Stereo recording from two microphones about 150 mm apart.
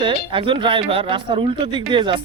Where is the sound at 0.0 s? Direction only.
35° right (ahead or behind).